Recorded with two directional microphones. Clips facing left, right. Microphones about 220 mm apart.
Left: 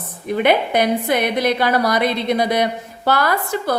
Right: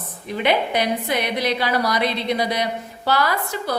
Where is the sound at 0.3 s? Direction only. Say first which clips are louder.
Left 4 dB; 50° left (ahead or behind).